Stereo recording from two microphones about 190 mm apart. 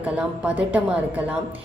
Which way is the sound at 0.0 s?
5° right (ahead or behind).